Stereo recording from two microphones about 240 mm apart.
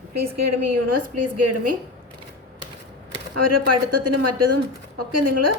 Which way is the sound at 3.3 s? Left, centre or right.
Right.